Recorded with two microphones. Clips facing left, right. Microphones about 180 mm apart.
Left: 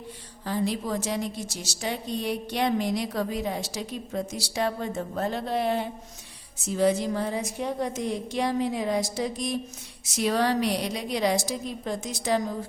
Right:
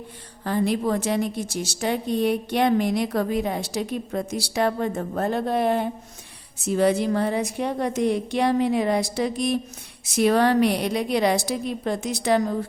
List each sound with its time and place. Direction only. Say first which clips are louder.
0.4 s a woman's voice: right 5 dB; 60° right (ahead or behind)
6.6 s a woman's voice: right 3 dB; 65° right (ahead or behind)